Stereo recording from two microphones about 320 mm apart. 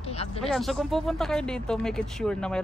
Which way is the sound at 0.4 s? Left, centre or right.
Centre.